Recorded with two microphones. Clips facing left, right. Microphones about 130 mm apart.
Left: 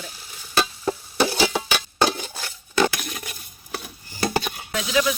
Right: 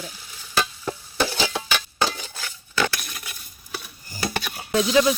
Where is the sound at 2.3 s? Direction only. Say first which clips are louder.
Left 4 dB; 30° left (ahead or behind).